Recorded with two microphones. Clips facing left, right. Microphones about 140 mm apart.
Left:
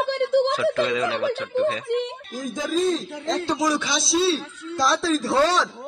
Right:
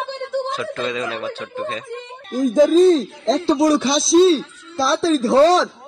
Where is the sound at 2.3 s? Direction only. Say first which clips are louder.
Right 15 dB; 50° right (ahead or behind).